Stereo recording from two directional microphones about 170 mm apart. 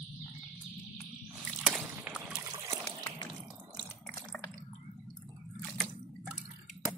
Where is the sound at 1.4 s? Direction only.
5° right (ahead or behind).